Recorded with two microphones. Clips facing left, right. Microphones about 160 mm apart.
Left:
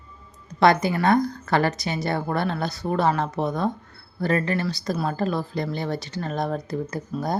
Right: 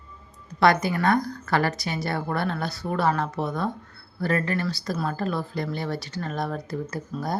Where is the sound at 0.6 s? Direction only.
20° left (ahead or behind).